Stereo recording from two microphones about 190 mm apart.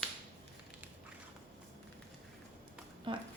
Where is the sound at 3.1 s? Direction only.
25° right (ahead or behind).